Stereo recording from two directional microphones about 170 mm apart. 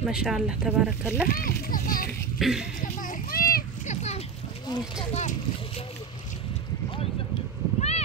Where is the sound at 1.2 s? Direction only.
60° left (ahead or behind).